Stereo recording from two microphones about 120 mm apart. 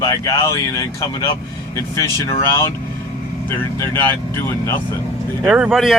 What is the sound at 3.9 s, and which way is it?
Speech, 20° left (ahead or behind).